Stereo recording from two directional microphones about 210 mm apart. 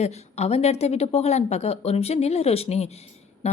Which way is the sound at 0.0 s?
30° left (ahead or behind).